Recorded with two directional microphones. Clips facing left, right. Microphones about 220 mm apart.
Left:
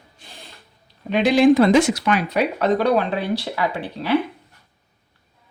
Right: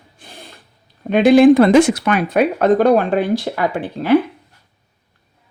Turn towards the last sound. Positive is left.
turn(degrees=-50)  # may be behind; listen again after turning